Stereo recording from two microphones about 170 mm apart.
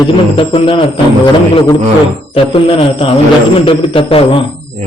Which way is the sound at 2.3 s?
35° left (ahead or behind).